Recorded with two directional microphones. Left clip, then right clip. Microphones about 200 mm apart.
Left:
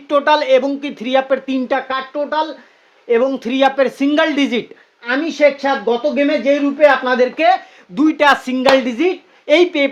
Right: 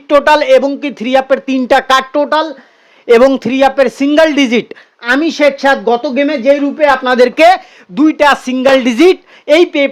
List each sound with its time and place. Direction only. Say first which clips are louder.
0.1 s speech: right 5 dB; 30° right (ahead or behind)
1.9 s speech: right 10 dB; 55° right (ahead or behind)
3.3 s speech: right 5 dB; 30° right (ahead or behind)
4.7 s speech: right 7 dB; 55° right (ahead or behind)
7.9 s speech: right 4 dB; 25° right (ahead or behind)